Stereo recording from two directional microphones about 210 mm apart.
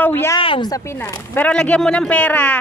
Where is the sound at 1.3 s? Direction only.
5° left (ahead or behind).